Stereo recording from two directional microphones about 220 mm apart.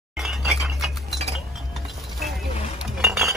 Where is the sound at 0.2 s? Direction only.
Centre (ahead or behind).